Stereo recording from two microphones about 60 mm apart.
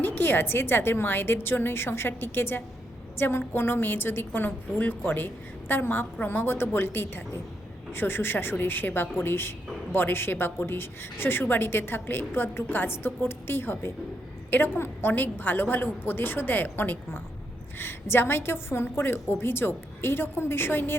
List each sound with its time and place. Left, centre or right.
0.0 s a woman's voice: left